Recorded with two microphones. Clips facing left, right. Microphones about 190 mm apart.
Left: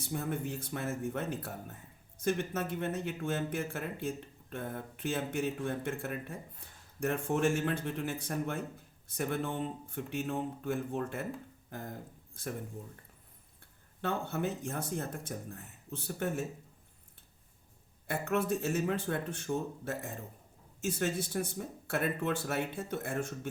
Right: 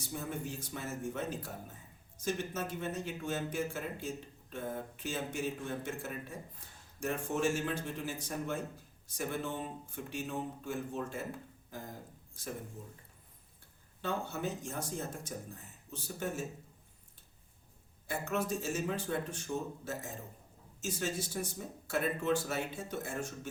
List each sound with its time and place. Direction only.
0.0 s speech: 60° left (ahead or behind)
14.0 s speech: 55° left (ahead or behind)
18.1 s speech: 60° left (ahead or behind)